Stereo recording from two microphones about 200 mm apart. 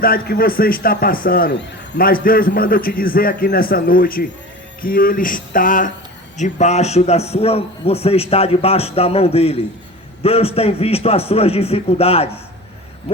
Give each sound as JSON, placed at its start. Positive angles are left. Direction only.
{"t": 0.0, "sound": "a man's voice", "side_deg": 45}